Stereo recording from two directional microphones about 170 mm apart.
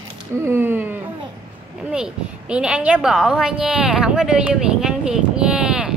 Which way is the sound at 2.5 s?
5° right (ahead or behind).